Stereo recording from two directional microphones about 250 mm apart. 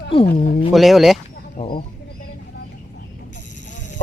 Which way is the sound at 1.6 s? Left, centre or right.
Left.